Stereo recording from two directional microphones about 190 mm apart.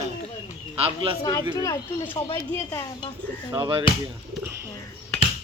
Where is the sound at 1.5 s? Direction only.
15° left (ahead or behind).